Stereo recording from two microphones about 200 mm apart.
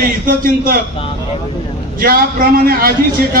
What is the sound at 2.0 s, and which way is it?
A man's voice, 45° right (ahead or behind).